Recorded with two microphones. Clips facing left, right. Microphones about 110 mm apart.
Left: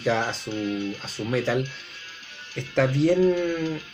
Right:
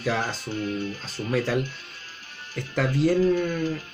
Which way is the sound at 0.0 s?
5° right (ahead or behind).